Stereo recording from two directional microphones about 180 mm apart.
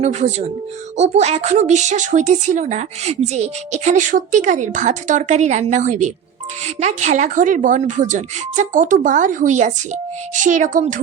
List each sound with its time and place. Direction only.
0.0 s speech: 40° right (ahead or behind)